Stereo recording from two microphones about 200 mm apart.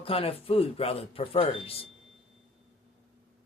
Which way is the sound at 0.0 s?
30° left (ahead or behind).